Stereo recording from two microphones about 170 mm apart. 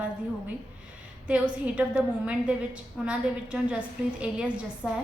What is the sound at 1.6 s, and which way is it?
A woman's voice, 5° right (ahead or behind).